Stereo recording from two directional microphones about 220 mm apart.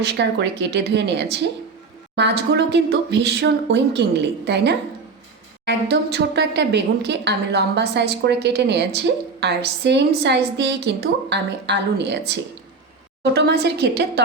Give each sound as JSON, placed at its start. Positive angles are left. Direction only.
{"t": 0.0, "sound": "a woman's voice", "side_deg": -50}